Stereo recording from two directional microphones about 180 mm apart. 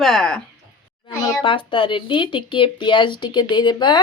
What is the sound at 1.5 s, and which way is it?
Speech, 30° left (ahead or behind).